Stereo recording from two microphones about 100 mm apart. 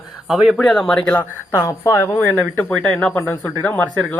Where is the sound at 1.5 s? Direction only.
30° left (ahead or behind).